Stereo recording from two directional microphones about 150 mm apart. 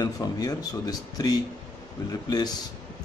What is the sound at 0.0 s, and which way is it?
Speech, 25° left (ahead or behind).